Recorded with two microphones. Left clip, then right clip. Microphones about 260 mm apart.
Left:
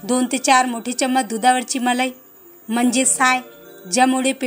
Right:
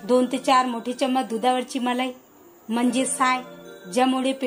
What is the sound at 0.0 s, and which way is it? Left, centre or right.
A woman's voice, left.